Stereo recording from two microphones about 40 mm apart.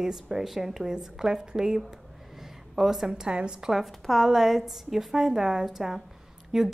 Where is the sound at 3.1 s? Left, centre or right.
Right.